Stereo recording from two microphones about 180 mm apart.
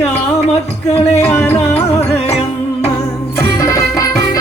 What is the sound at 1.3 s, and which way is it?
Music, 10° left (ahead or behind).